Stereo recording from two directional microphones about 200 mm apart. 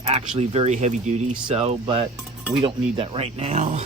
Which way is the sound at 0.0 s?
35° right (ahead or behind).